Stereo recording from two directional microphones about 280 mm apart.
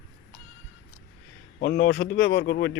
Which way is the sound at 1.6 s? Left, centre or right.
Left.